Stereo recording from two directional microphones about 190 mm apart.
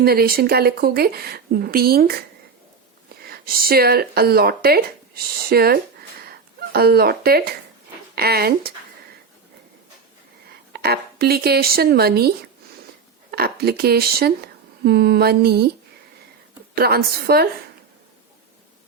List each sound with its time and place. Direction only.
0.0 s speech: 55° right (ahead or behind)
3.2 s speech: 50° right (ahead or behind)
6.2 s a sound: 55° right (ahead or behind)
8.1 s speech: 55° right (ahead or behind)
10.7 s speech: 55° right (ahead or behind)
13.3 s speech: 55° right (ahead or behind)
16.7 s speech: 55° right (ahead or behind)